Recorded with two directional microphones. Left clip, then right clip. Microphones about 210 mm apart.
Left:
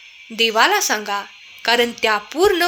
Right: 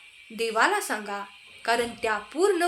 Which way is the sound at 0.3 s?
35° left (ahead or behind).